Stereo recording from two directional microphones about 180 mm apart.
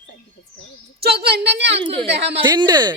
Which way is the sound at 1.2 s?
65° right (ahead or behind).